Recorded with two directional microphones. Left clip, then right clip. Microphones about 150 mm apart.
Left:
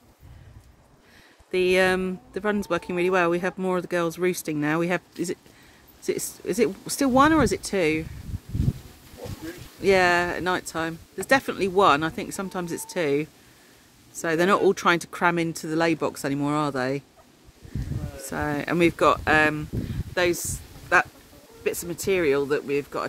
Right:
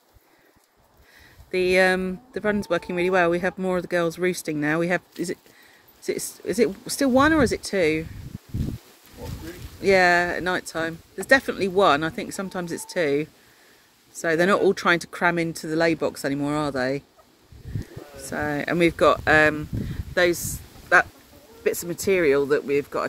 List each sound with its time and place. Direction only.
1.8 s speech: 15° left (ahead or behind)
6.0 s speech: 15° left (ahead or behind)
9.8 s speech: 15° left (ahead or behind)
18.3 s speech: 15° left (ahead or behind)
19.2 s speech: 5° right (ahead or behind)
21.6 s speech: 20° right (ahead or behind)